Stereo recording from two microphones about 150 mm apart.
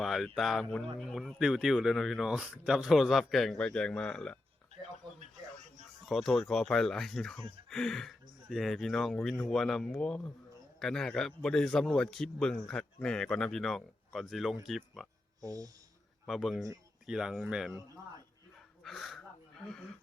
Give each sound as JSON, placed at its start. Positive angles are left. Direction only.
{"t": 0.0, "sound": "speech", "side_deg": 0}
{"t": 6.1, "sound": "speech", "side_deg": 0}
{"t": 15.4, "sound": "speech", "side_deg": -25}
{"t": 16.2, "sound": "speech", "side_deg": 0}
{"t": 18.9, "sound": "a sound", "side_deg": 0}